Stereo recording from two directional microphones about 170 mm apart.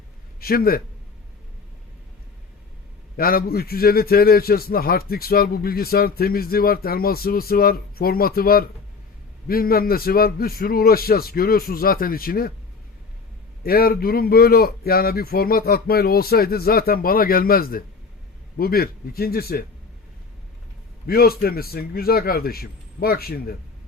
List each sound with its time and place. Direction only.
0.3 s a man's voice: 60° left (ahead or behind)
3.2 s a man's voice: 60° left (ahead or behind)
13.6 s a man's voice: 60° left (ahead or behind)
21.1 s a man's voice: 60° left (ahead or behind)